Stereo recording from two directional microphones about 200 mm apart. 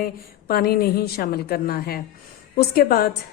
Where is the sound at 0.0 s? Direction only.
50° left (ahead or behind).